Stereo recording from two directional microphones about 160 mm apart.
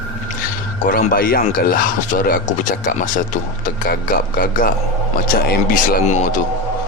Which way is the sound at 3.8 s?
65° left (ahead or behind).